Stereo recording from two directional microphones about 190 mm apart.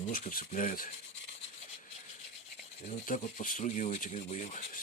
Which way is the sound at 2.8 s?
40° left (ahead or behind).